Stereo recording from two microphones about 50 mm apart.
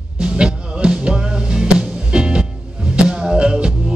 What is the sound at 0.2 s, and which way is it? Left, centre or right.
Music, centre.